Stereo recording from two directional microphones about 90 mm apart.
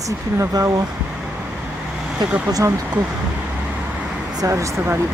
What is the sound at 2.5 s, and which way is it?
Speech, 40° right (ahead or behind).